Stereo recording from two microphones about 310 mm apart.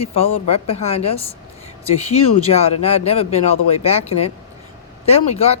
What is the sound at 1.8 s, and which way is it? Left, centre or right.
Speech, centre.